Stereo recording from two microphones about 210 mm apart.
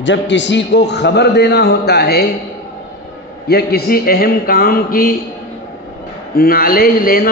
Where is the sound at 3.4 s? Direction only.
50° left (ahead or behind).